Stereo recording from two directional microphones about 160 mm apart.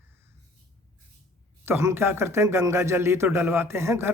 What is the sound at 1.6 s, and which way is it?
Speech, 15° right (ahead or behind).